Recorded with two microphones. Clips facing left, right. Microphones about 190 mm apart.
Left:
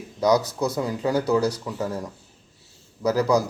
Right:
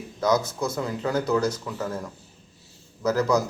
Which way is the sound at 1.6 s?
15° left (ahead or behind).